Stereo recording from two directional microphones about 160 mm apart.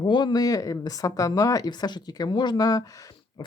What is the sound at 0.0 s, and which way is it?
Speech, 25° left (ahead or behind).